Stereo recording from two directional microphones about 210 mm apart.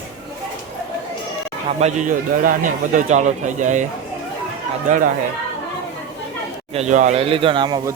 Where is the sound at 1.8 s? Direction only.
35° right (ahead or behind).